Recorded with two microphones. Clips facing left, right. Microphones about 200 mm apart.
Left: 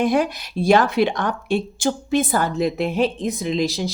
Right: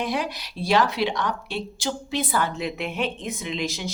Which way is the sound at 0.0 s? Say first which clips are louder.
Left 8 dB; 50° left (ahead or behind).